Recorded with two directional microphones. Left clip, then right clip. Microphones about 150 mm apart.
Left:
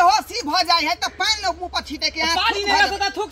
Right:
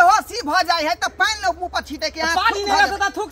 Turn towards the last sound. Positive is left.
turn(degrees=5)  # may be behind; listen again after turning